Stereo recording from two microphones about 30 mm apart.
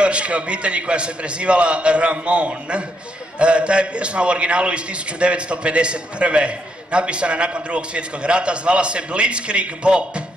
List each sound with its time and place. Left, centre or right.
0.0 s a man's voice: right